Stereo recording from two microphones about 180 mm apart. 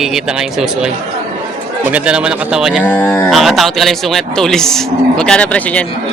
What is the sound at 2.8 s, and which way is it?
Speech, 10° left (ahead or behind).